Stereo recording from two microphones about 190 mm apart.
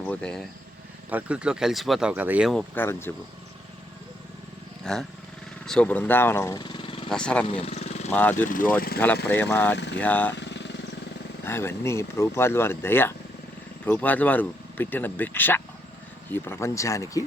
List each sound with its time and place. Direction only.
0.0 s speech: 5° left (ahead or behind)
1.1 s speech: 5° right (ahead or behind); by 3.1 s 10° left (ahead or behind)
4.8 s speech: 5° left (ahead or behind); by 7.1 s 30° left (ahead or behind)
7.1 s speech: 5° left (ahead or behind)
7.4 s vehicle: 30° left (ahead or behind)
8.1 s speech: 10° left (ahead or behind)
8.4 s speech: 45° left (ahead or behind)
9.2 s speech: 10° left (ahead or behind)
9.7 s speech: 65° left (ahead or behind)
10.0 s speech: 10° left (ahead or behind)
10.3 s vehicle: 65° left (ahead or behind)
11.4 s speech: 15° left (ahead or behind)